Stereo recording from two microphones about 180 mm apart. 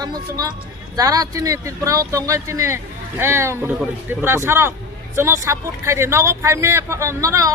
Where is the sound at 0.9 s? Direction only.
20° right (ahead or behind).